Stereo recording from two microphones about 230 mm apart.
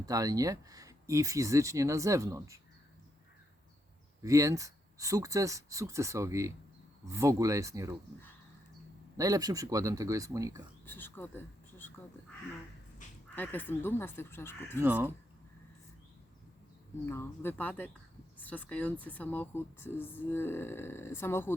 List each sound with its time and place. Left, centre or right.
0.0 s speech: centre
4.2 s speech: centre
9.1 s speech: centre
10.8 s speech: centre
13.3 s speech: centre
14.8 s speech: centre
17.1 s speech: centre